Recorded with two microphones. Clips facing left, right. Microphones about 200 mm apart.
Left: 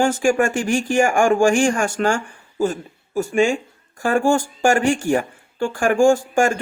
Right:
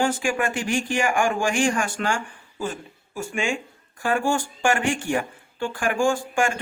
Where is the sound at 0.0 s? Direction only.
45° left (ahead or behind).